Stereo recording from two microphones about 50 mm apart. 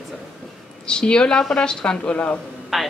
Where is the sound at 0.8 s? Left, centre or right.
Centre.